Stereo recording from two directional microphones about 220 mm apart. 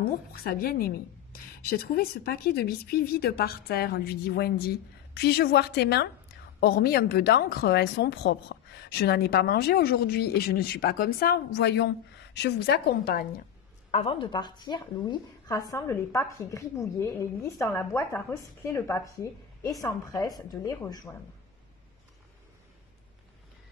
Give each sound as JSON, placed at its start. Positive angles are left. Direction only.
{"t": 0.0, "sound": "a woman's voice", "side_deg": 45}
{"t": 13.9, "sound": "a woman's voice", "side_deg": 25}